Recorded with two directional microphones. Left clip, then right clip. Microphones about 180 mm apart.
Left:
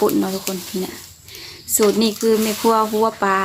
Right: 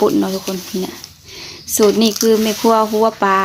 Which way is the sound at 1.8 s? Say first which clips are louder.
Right 4 dB; 15° right (ahead or behind).